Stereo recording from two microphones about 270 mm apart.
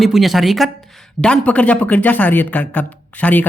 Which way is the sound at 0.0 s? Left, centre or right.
Centre.